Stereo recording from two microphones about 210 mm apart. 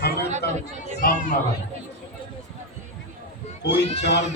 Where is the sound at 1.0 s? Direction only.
40° left (ahead or behind).